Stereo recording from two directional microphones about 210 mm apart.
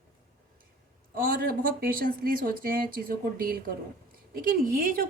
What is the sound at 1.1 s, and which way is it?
A woman's voice, 45° right (ahead or behind).